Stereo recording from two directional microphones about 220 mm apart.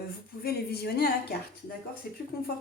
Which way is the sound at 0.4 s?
45° left (ahead or behind).